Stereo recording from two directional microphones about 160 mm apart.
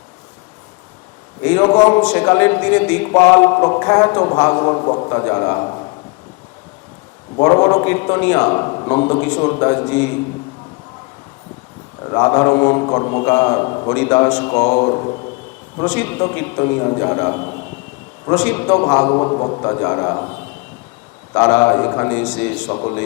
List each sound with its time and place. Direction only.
1.5 s a man's voice: 20° left (ahead or behind)
7.4 s a man's voice: 25° left (ahead or behind)
12.0 s a man's voice: 25° left (ahead or behind)
13.9 s a man's voice: 15° left (ahead or behind)
15.9 s a man's voice: 15° left (ahead or behind)
18.6 s a man's voice: 25° left (ahead or behind)
22.6 s a man's voice: 30° left (ahead or behind)